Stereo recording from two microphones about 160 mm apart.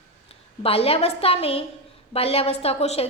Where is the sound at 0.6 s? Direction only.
35° left (ahead or behind).